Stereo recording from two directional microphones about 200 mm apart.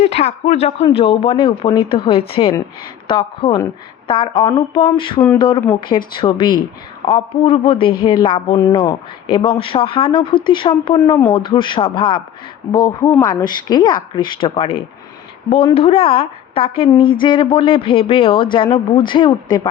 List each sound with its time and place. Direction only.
0.0 s speech: 30° left (ahead or behind)